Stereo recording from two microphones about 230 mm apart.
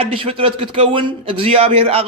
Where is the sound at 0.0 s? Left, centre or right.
Right.